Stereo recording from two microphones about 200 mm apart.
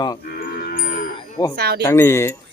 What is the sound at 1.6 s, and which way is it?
Speech, 50° right (ahead or behind).